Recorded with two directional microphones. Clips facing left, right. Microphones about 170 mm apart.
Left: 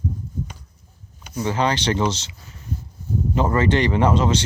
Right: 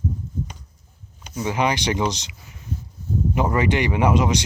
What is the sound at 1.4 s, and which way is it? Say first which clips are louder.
Speech: left 1 dB; 15° right (ahead or behind).